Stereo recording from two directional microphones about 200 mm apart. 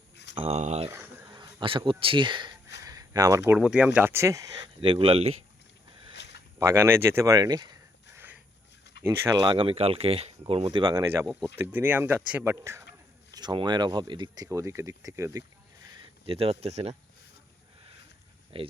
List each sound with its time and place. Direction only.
0.3 s speech: 30° right (ahead or behind)
0.9 s speech: 10° right (ahead or behind)
4.8 s speech: 25° right (ahead or behind)
6.6 s speech: 10° right (ahead or behind)
9.0 s speech: 20° right (ahead or behind)
11.3 s speech: 5° left (ahead or behind)
11.5 s speech: 10° right (ahead or behind)
16.2 s speech: 30° right (ahead or behind)
18.5 s speech: 25° right (ahead or behind)